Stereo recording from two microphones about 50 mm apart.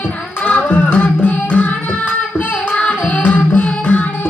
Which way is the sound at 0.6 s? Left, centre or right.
Left.